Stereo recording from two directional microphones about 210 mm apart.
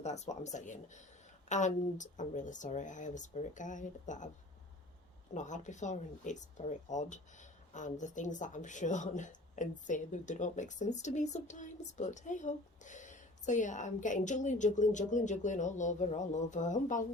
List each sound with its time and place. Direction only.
0.0 s speech: 35° left (ahead or behind)
5.3 s speech: 35° left (ahead or behind)